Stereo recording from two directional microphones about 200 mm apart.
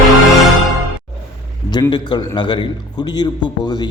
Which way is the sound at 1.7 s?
20° left (ahead or behind).